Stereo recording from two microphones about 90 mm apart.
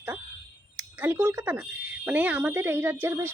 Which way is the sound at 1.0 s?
25° right (ahead or behind).